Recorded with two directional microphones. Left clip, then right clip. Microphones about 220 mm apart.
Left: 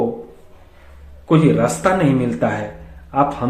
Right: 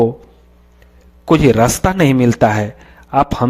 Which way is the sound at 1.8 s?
50° right (ahead or behind).